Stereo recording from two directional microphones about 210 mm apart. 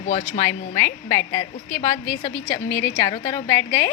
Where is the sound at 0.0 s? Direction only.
35° left (ahead or behind).